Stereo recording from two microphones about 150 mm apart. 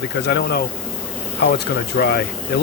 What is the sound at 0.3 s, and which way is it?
Speech, 90° left.